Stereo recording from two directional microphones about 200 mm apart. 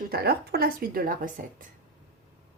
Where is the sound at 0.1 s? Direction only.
50° right (ahead or behind).